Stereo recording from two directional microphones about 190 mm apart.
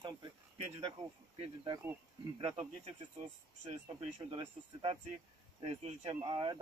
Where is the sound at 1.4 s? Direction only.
25° right (ahead or behind).